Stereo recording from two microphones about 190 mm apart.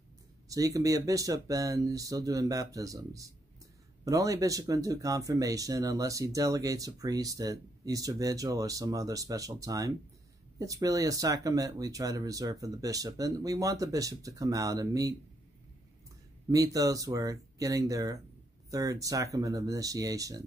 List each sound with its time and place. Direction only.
0.5 s speech: 20° right (ahead or behind)
16.4 s speech: 20° right (ahead or behind)